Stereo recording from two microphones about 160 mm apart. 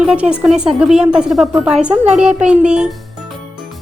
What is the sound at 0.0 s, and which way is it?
Speech, 5° right (ahead or behind).